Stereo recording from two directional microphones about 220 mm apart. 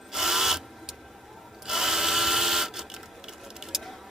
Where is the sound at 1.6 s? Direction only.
Centre (ahead or behind).